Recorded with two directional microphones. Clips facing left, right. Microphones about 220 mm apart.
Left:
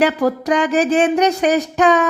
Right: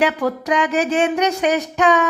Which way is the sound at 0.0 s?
35° left (ahead or behind).